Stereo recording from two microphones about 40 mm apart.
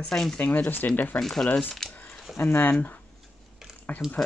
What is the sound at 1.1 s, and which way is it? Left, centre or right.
Speech, centre.